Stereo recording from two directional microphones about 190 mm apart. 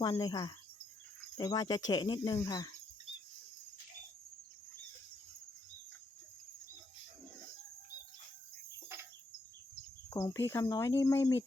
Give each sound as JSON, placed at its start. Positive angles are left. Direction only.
{"t": 0.0, "sound": "speech", "side_deg": 20}
{"t": 10.1, "sound": "speech", "side_deg": 15}